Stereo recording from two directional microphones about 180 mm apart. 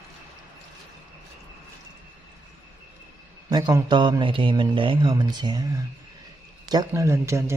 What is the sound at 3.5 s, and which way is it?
A man's voice, 20° right (ahead or behind).